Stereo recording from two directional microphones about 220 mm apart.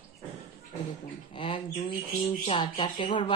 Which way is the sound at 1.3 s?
20° left (ahead or behind).